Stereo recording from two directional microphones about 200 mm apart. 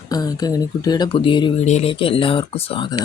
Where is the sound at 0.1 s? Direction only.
20° left (ahead or behind).